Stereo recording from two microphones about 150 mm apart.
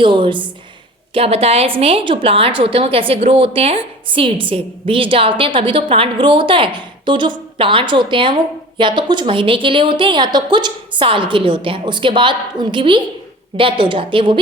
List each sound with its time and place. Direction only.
0.0 s a woman's voice: 35° right (ahead or behind)